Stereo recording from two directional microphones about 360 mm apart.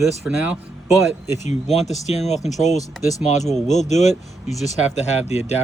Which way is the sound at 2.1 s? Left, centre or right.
Centre.